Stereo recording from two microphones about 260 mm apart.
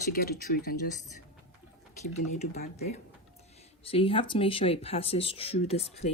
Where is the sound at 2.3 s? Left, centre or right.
Left.